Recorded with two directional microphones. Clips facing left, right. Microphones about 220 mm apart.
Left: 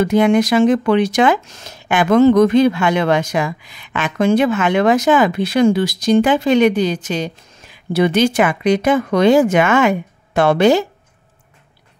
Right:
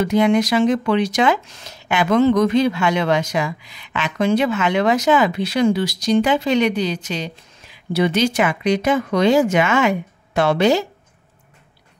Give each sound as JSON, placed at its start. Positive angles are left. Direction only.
{"t": 0.0, "sound": "speech", "side_deg": 50}